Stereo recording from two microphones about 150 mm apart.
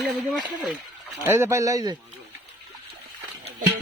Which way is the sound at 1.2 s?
15° right (ahead or behind).